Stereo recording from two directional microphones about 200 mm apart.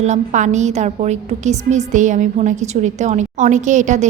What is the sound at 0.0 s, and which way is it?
A woman's voice, 35° right (ahead or behind).